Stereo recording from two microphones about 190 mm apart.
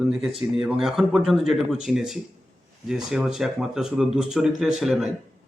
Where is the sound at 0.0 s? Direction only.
Centre (ahead or behind).